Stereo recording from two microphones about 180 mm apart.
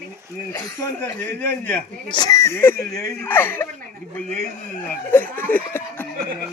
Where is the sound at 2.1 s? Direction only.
20° left (ahead or behind).